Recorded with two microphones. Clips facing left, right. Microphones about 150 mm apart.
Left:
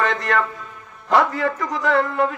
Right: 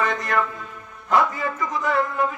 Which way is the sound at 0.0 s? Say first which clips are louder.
Left 3 dB; 70° left (ahead or behind).